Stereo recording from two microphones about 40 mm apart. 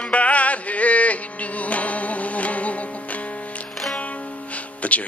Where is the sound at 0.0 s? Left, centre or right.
Left.